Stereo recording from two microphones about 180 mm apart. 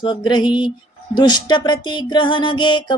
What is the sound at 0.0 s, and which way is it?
Music, 25° left (ahead or behind).